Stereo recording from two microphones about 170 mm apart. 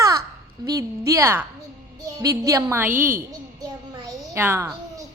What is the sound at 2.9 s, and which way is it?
Speech, 55° right (ahead or behind).